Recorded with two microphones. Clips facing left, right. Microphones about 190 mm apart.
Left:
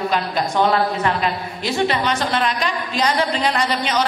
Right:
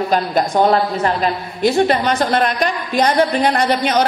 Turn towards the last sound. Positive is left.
turn(degrees=-50)  # may be behind; listen again after turning